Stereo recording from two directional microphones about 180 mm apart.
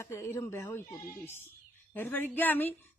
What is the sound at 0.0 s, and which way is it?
Speech, 15° left (ahead or behind).